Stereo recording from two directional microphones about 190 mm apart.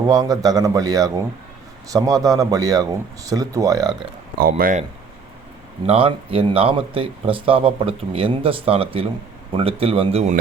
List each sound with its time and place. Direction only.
0.1 s speech: 20° right (ahead or behind)
4.4 s speech: 50° right (ahead or behind)
5.8 s speech: 30° right (ahead or behind)